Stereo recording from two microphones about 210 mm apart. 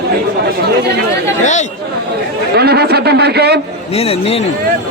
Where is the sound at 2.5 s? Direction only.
50° right (ahead or behind).